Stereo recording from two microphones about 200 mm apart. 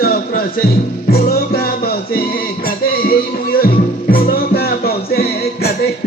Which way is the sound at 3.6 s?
50° left (ahead or behind).